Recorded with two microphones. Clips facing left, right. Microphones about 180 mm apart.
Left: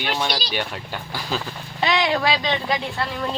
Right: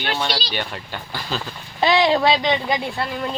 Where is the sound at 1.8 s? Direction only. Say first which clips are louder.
Right 4 dB; 30° right (ahead or behind).